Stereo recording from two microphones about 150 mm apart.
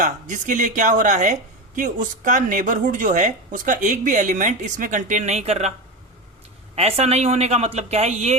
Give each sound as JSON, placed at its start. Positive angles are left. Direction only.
{"t": 0.0, "sound": "speech", "side_deg": -60}
{"t": 6.7, "sound": "speech", "side_deg": -40}